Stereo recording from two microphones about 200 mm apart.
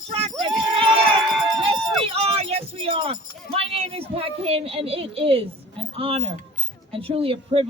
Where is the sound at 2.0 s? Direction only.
30° right (ahead or behind).